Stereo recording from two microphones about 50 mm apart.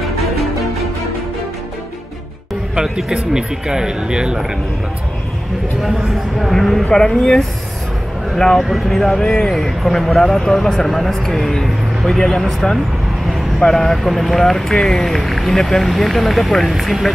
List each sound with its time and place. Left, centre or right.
0.0 s music: centre
2.7 s speech: centre
5.8 s speech: centre